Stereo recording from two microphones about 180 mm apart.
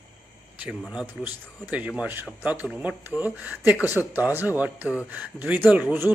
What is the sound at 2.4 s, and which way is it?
Speech, 10° right (ahead or behind).